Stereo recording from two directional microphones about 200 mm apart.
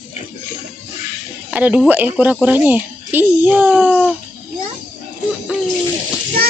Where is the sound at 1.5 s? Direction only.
5° right (ahead or behind).